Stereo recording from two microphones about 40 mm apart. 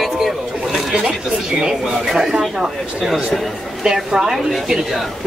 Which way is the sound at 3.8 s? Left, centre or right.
Centre.